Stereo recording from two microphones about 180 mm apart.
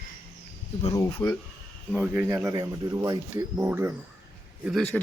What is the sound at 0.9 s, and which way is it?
Speech, 15° left (ahead or behind).